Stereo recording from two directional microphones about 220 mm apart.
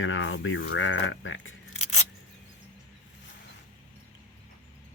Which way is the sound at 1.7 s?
30° left (ahead or behind).